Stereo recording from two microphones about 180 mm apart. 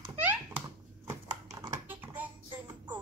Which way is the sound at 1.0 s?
20° right (ahead or behind).